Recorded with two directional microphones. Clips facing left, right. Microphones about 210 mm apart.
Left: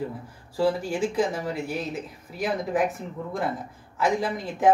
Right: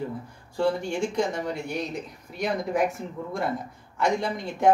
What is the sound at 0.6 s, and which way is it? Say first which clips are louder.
Speech: left 1 dB; 5° left (ahead or behind).